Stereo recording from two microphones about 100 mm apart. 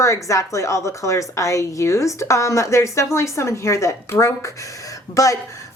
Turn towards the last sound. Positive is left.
turn(degrees=35)  # may be behind; listen again after turning